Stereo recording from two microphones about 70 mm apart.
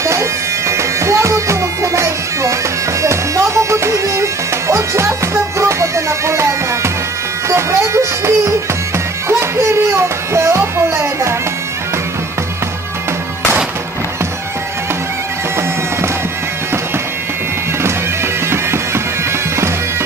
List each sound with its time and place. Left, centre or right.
0.0 s bagpipes: right
3.0 s music: right
7.4 s a sound: right
9.3 s music: right